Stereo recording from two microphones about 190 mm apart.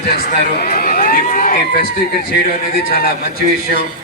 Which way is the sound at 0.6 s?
50° left (ahead or behind).